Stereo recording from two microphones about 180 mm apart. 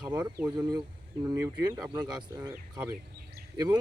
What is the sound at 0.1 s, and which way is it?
Speech, 15° right (ahead or behind).